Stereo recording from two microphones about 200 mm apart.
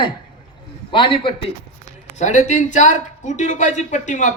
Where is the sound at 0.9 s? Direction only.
25° left (ahead or behind).